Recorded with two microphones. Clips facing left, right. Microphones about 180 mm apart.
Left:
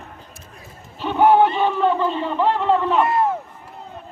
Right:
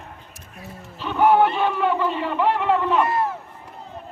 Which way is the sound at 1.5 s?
10° right (ahead or behind).